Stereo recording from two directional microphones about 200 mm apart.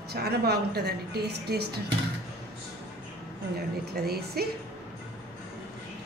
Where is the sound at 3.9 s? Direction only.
50° right (ahead or behind).